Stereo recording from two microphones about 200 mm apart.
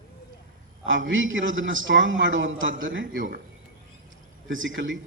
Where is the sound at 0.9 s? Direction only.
70° right (ahead or behind).